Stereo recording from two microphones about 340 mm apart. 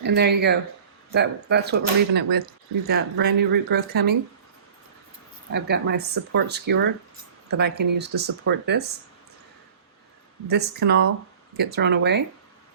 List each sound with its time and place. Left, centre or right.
0.0 s speech: right
5.5 s speech: right
10.5 s speech: right